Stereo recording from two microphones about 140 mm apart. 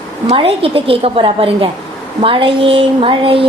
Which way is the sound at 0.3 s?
40° right (ahead or behind).